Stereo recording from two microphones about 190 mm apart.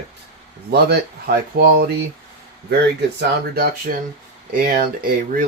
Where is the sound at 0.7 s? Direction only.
55° right (ahead or behind).